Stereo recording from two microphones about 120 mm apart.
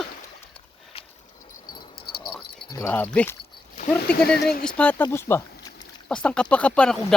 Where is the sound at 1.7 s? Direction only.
40° left (ahead or behind).